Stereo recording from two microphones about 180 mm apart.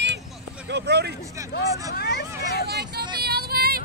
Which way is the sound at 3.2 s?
60° right (ahead or behind).